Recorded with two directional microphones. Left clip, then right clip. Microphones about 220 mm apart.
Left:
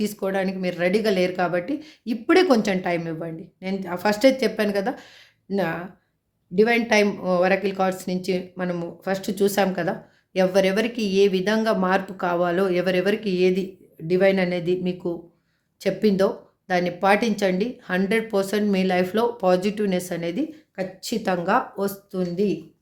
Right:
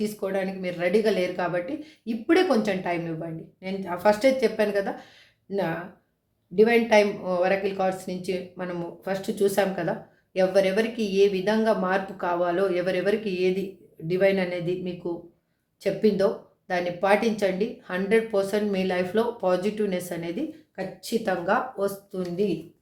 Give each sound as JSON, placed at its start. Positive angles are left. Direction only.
{"t": 0.0, "sound": "speech", "side_deg": 45}